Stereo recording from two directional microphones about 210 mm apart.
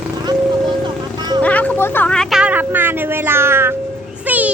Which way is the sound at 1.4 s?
5° left (ahead or behind).